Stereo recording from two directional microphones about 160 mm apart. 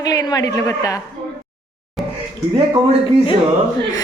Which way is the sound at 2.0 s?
Centre (ahead or behind).